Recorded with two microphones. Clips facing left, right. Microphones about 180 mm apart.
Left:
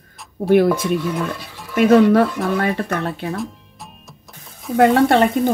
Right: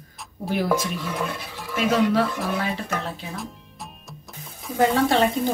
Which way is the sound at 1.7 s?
55° left (ahead or behind).